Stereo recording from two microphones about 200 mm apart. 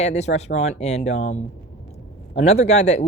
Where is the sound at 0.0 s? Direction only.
35° left (ahead or behind).